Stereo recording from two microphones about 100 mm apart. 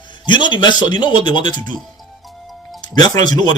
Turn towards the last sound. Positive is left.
turn(degrees=45)  # may be behind; listen again after turning